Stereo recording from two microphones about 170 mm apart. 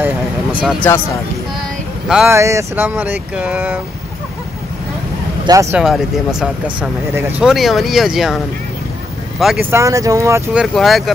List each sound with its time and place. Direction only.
0.6 s speech: 10° right (ahead or behind)
2.2 s speech: 15° right (ahead or behind)
5.5 s speech: 20° right (ahead or behind)
5.8 s speech: centre (ahead or behind)
9.4 s speech: 5° right (ahead or behind)
9.7 s speech: 15° right (ahead or behind)
10.6 s speech: centre (ahead or behind)